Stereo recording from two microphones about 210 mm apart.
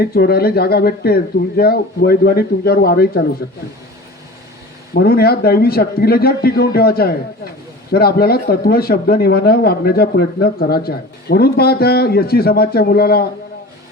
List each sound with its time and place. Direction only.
0.0 s speech: 45° left (ahead or behind)
4.9 s speech: 45° left (ahead or behind)